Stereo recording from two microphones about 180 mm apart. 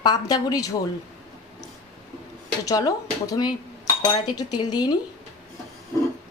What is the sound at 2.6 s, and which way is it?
A woman's voice, 20° left (ahead or behind).